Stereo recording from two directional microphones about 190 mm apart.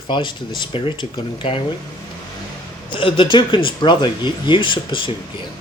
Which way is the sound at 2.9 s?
25° left (ahead or behind).